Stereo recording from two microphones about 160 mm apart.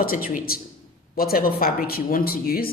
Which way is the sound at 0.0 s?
65° left (ahead or behind).